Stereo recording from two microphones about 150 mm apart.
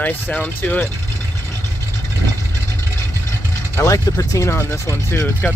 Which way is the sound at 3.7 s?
20° left (ahead or behind).